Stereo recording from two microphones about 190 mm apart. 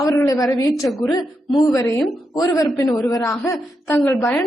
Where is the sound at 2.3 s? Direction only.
20° left (ahead or behind).